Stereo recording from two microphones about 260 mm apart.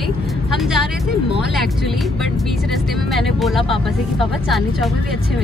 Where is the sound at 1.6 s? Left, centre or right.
Centre.